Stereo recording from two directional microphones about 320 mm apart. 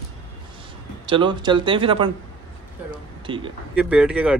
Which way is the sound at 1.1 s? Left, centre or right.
Centre.